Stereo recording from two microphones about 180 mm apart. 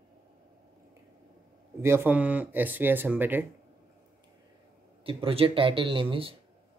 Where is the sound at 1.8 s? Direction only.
15° right (ahead or behind).